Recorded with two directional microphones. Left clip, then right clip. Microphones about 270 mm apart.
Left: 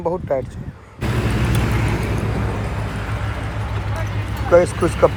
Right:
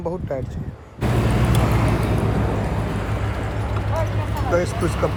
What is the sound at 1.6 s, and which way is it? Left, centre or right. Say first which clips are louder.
Vehicle: right 1 dB; right.